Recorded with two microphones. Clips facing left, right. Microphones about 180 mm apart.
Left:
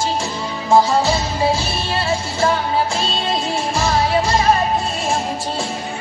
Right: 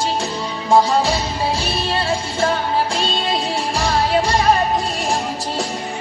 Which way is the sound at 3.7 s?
35° right (ahead or behind).